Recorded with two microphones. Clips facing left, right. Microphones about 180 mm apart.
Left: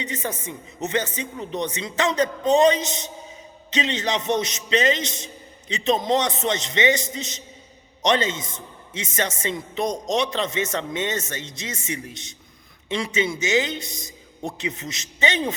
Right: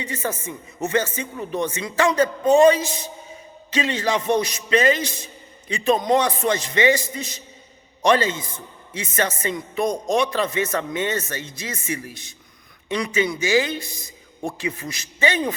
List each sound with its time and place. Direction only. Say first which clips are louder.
0.0 s a man's voice: right 2 dB; 20° left (ahead or behind)